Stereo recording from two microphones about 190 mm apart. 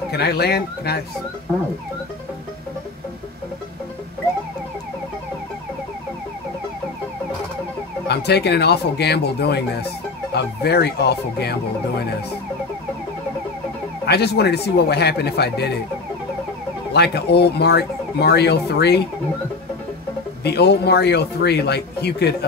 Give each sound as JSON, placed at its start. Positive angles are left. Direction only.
{"t": 0.1, "sound": "speech", "side_deg": 60}
{"t": 8.1, "sound": "speech", "side_deg": 60}
{"t": 14.0, "sound": "speech", "side_deg": 60}
{"t": 16.9, "sound": "speech", "side_deg": 60}
{"t": 20.4, "sound": "speech", "side_deg": 60}